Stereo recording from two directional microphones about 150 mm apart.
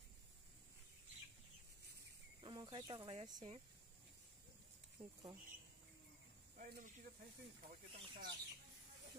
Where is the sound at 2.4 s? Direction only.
30° right (ahead or behind).